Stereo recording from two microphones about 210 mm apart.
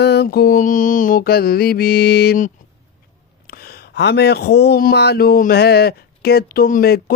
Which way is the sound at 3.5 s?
45° left (ahead or behind).